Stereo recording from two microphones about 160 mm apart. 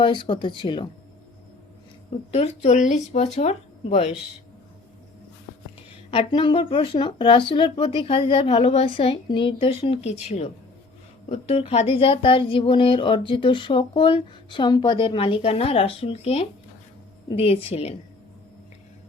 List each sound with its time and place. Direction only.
0.0 s speech: 30° left (ahead or behind)
2.3 s speech: 40° left (ahead or behind)
6.1 s speech: 35° left (ahead or behind)